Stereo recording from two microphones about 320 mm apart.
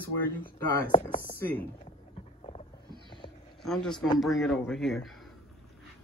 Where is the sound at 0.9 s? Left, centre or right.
Centre.